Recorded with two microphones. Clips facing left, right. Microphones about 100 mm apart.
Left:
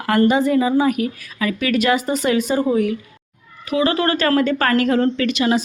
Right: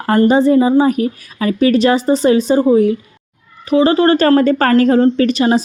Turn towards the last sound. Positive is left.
turn(degrees=-35)  # may be behind; listen again after turning